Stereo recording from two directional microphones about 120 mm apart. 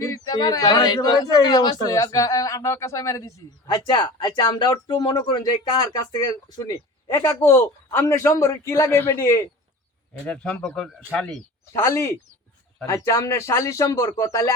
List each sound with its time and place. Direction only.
0.0 s speech: 30° left (ahead or behind)
10.2 s speech: 10° left (ahead or behind)
11.7 s speech: 25° left (ahead or behind)